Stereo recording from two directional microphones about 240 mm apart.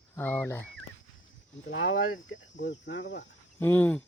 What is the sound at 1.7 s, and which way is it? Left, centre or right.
Speech, left.